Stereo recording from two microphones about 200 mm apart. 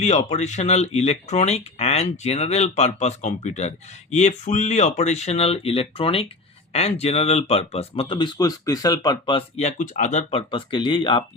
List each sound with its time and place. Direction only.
0.0 s speech: 35° left (ahead or behind)